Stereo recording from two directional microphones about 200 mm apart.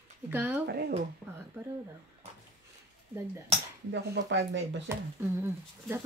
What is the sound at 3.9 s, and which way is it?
Speech, 60° right (ahead or behind).